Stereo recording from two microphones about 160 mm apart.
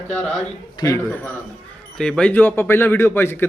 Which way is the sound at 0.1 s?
5° left (ahead or behind).